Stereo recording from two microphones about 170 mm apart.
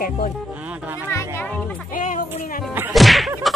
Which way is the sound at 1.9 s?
50° left (ahead or behind).